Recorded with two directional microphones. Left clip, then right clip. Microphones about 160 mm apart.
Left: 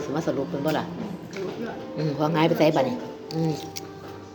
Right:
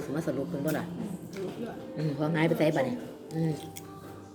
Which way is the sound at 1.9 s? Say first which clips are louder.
Left 7 dB; 20° right (ahead or behind).